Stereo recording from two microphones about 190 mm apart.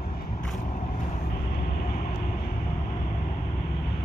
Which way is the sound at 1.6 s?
55° left (ahead or behind).